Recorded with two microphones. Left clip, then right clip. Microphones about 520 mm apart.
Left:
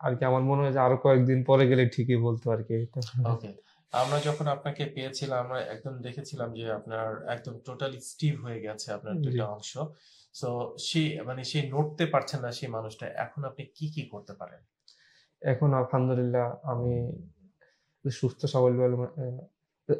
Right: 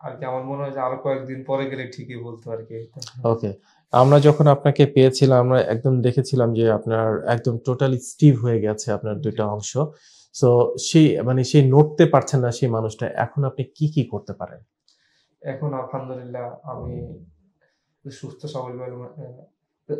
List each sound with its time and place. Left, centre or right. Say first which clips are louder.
0.0 s speech: left 1 dB; left
3.0 s speech: right 13 dB; right
15.4 s speech: left 1 dB; left
18.0 s speech: left 4 dB; left